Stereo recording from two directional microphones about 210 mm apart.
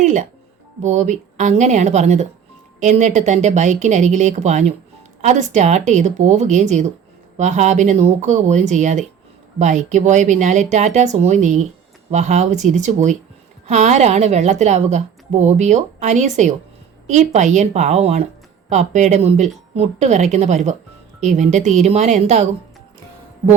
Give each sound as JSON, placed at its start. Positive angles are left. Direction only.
{"t": 0.0, "sound": "a woman's voice", "side_deg": -35}